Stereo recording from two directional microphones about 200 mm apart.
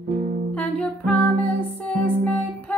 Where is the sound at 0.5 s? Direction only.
5° left (ahead or behind).